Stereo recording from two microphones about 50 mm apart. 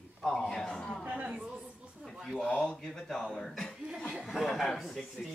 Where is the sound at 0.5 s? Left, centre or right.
Centre.